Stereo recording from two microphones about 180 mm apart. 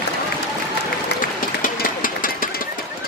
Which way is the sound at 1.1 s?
65° left (ahead or behind).